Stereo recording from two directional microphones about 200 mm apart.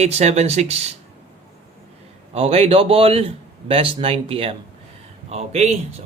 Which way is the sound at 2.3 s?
30° right (ahead or behind).